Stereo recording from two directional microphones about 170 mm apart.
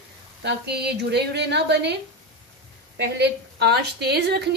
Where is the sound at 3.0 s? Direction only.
75° right (ahead or behind).